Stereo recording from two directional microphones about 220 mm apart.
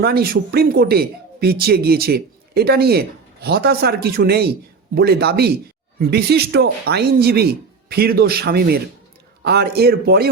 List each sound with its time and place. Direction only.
0.0 s speech: 45° right (ahead or behind)